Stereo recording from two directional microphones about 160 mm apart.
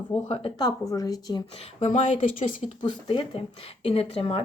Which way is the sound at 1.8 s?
50° left (ahead or behind).